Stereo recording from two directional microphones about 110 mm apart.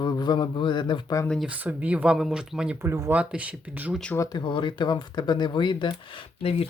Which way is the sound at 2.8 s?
25° right (ahead or behind).